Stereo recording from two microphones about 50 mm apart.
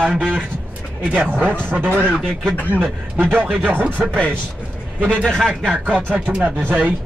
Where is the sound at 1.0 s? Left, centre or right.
Right.